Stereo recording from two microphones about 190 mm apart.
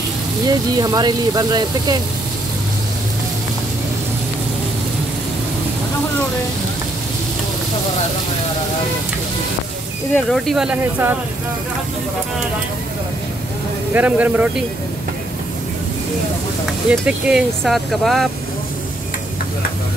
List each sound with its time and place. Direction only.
0.5 s speech: 20° right (ahead or behind)
10.1 s speech: centre (ahead or behind)
13.9 s speech: 10° right (ahead or behind)
17.3 s speech: centre (ahead or behind)